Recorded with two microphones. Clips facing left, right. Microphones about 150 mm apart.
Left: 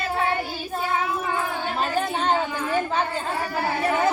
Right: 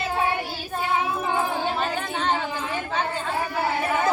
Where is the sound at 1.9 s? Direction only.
35° left (ahead or behind).